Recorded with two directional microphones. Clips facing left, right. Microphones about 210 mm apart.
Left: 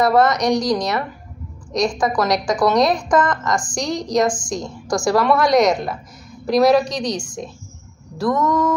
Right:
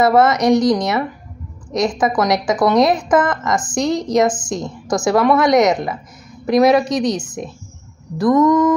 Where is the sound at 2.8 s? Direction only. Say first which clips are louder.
Right 2 dB; 25° right (ahead or behind).